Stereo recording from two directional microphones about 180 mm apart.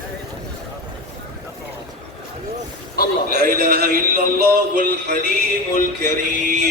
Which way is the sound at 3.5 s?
55° right (ahead or behind).